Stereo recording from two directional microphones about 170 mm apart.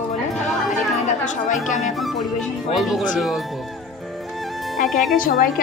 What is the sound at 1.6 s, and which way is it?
Speech, 45° left (ahead or behind).